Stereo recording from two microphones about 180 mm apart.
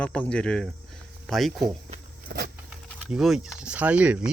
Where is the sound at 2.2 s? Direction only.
60° right (ahead or behind).